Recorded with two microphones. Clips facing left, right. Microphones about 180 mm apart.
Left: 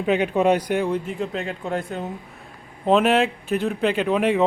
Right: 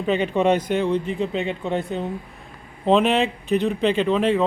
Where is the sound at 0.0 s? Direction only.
10° left (ahead or behind).